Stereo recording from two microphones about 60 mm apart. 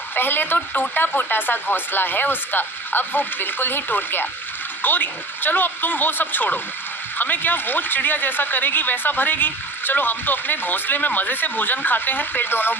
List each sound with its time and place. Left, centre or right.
0.1 s speech: left